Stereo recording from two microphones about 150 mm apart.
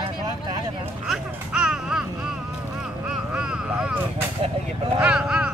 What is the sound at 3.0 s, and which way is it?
Vehicle, 5° right (ahead or behind).